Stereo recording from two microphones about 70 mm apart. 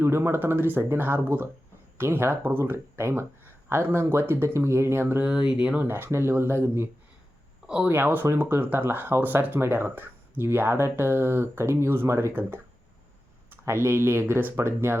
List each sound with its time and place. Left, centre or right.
0.0 s speech: right
5.2 s speech: centre
5.8 s speech: right
7.9 s speech: right